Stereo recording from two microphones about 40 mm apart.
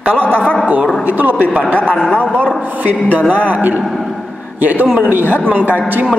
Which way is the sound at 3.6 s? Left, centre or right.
Right.